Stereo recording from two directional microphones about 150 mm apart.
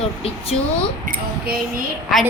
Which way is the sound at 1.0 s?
70° right (ahead or behind).